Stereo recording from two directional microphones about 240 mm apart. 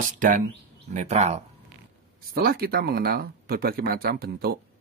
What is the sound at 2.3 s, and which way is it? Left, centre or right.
Speech, right.